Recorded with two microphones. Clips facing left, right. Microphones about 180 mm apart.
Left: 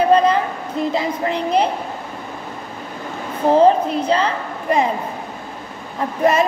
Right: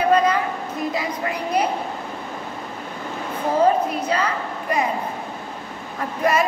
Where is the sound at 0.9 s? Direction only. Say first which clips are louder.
Left 5 dB; 25° left (ahead or behind).